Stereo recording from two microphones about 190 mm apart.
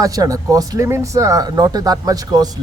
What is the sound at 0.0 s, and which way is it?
Speech, 20° right (ahead or behind).